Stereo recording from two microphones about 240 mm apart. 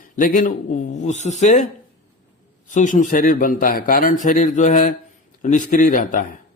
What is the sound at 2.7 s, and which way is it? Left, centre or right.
Speech, left.